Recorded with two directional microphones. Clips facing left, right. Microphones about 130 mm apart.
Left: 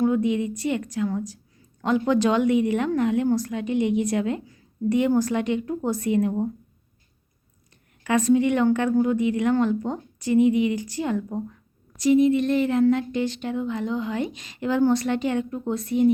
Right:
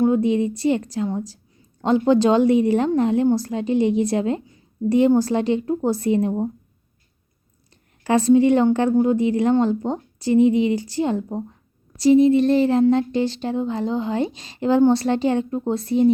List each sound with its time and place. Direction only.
0.0 s a woman's voice: 30° right (ahead or behind)
8.0 s a woman's voice: 30° right (ahead or behind)